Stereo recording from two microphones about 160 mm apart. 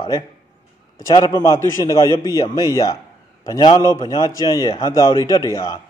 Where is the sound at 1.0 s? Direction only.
25° left (ahead or behind).